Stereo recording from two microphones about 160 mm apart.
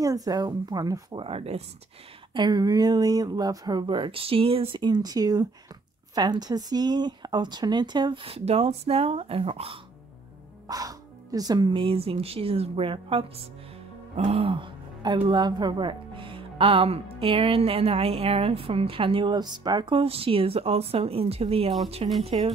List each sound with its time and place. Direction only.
0.0 s a woman's voice: 20° right (ahead or behind)
1.2 s speech: 40° right (ahead or behind)
2.3 s a woman's voice: 25° right (ahead or behind)
10.7 s speech: 20° right (ahead or behind); by 22.5 s 35° right (ahead or behind)